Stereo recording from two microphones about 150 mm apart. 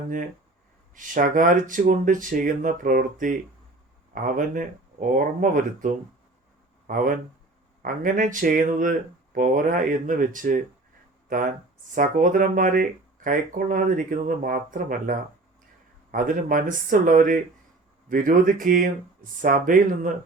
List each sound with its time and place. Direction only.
0.9 s speech: 60° right (ahead or behind)
16.1 s speech: 65° right (ahead or behind)